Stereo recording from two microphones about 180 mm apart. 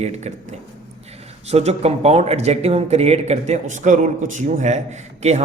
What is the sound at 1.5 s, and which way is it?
Speech, 35° right (ahead or behind).